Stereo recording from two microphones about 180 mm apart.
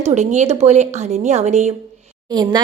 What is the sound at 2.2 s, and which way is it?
Speech, 25° right (ahead or behind).